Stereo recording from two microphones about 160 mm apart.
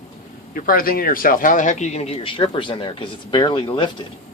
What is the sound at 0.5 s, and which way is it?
Speech, 60° left (ahead or behind).